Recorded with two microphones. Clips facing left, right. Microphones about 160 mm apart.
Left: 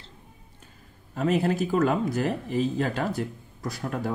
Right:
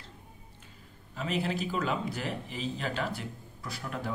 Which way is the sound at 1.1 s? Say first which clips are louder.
Left 8 dB; 50° left (ahead or behind).